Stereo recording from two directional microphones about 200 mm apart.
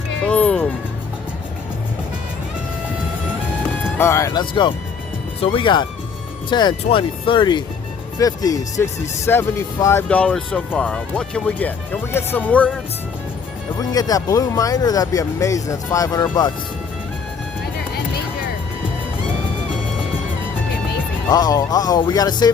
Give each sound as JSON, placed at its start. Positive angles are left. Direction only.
{"t": 0.3, "sound": "music", "side_deg": 5}
{"t": 3.9, "sound": "speech", "side_deg": 15}
{"t": 13.7, "sound": "speech", "side_deg": 20}
{"t": 21.2, "sound": "speech", "side_deg": 20}